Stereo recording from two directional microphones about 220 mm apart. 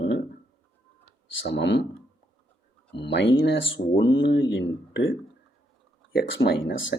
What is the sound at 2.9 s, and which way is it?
Speech, 55° left (ahead or behind).